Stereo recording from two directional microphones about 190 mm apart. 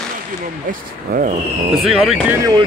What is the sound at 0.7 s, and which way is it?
Speech, 45° right (ahead or behind).